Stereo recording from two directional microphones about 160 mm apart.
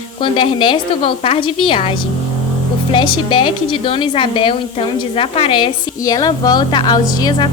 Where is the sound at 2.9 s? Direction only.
30° left (ahead or behind).